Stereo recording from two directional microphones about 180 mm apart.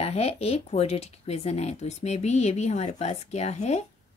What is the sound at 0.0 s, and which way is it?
Speech, 35° left (ahead or behind).